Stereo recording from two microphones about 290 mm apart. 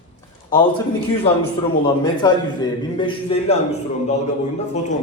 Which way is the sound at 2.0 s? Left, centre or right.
Centre.